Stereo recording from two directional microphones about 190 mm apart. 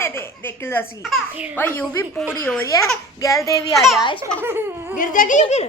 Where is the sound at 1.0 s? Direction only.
5° right (ahead or behind).